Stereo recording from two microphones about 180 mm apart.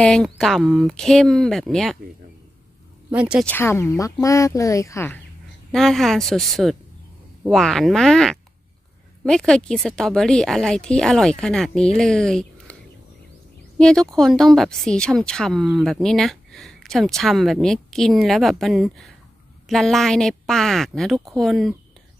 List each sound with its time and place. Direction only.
0.0 s speech: 5° left (ahead or behind)
3.1 s speech: 5° right (ahead or behind)
3.4 s speech: 10° left (ahead or behind)
5.7 s speech: centre (ahead or behind)
13.7 s speech: 5° left (ahead or behind)